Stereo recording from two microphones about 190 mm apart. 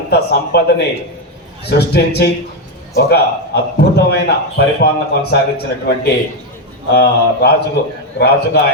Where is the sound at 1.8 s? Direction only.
60° left (ahead or behind).